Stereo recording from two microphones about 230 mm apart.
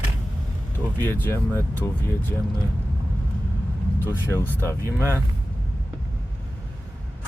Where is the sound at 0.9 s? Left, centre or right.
Centre.